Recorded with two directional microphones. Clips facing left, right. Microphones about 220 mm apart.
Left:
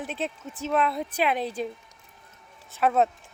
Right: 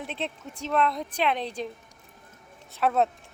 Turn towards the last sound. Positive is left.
turn(degrees=0)  # may be behind; listen again after turning